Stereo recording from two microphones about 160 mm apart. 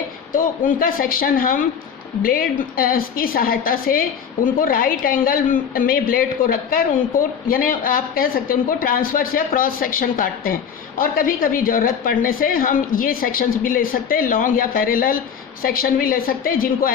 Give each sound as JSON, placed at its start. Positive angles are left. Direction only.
{"t": 0.3, "sound": "a woman's voice", "side_deg": 60}